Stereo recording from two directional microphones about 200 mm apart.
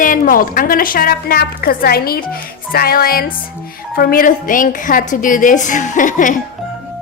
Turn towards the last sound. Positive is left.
turn(degrees=40)  # may be behind; listen again after turning